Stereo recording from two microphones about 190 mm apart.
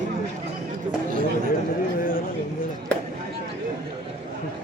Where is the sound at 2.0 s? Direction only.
50° left (ahead or behind).